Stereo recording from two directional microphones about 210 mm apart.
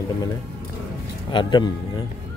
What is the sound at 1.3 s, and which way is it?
Speech, 20° left (ahead or behind).